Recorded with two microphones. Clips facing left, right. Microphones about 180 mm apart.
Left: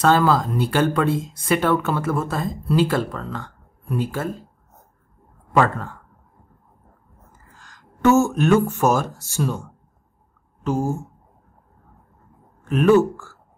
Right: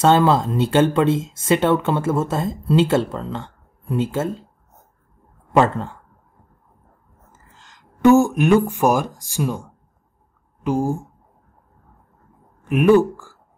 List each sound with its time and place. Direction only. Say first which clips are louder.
0.0 s speech: right 2 dB; 25° right (ahead or behind)
5.6 s speech: right 2 dB; 25° right (ahead or behind)
7.3 s speech: even; 25° right (ahead or behind)
12.6 s speech: right 1 dB; 15° right (ahead or behind)